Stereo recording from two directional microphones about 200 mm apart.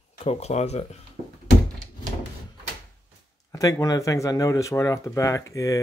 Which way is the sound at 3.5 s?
15° left (ahead or behind).